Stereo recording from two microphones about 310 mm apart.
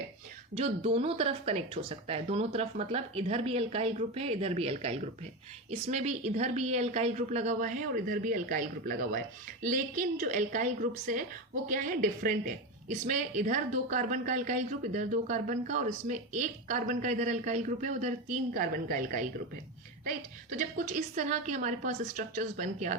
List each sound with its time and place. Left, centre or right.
0.5 s a woman's voice: centre
20.6 s a woman's voice: right